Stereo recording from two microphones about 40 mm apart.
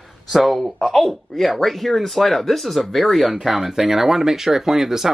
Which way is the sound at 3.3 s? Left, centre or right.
Centre.